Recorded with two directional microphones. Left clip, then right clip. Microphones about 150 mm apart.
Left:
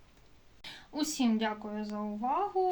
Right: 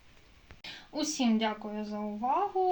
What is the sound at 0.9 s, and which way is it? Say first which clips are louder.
Speech: right 1 dB; 40° right (ahead or behind).